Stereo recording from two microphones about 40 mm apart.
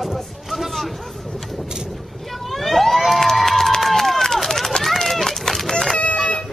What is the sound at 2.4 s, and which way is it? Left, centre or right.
Vehicle, centre.